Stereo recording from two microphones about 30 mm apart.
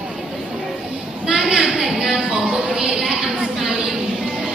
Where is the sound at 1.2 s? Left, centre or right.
Right.